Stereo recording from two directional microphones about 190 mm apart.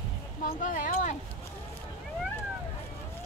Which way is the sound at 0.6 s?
45° left (ahead or behind).